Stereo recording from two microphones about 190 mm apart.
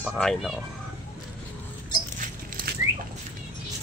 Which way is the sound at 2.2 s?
50° right (ahead or behind).